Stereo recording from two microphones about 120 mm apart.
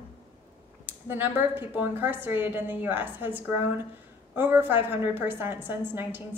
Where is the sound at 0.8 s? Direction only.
15° right (ahead or behind).